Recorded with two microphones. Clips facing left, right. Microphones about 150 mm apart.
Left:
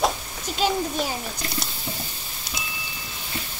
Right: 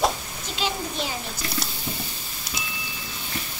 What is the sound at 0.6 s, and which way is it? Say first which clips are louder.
Speech: left 5 dB; 45° left (ahead or behind).